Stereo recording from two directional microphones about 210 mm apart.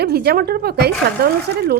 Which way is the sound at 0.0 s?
50° right (ahead or behind).